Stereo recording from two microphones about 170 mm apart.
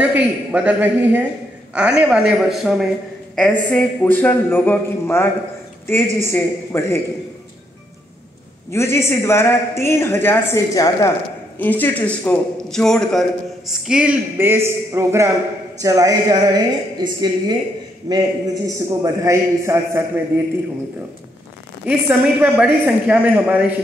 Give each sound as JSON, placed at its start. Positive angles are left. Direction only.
{"t": 0.0, "sound": "a woman's voice", "side_deg": -10}
{"t": 6.3, "sound": "a man's voice", "side_deg": 15}
{"t": 8.6, "sound": "a man's voice", "side_deg": 15}
{"t": 21.8, "sound": "a woman's voice", "side_deg": -10}